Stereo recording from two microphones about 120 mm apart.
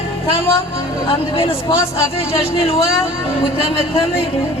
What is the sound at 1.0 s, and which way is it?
Speech, 45° left (ahead or behind).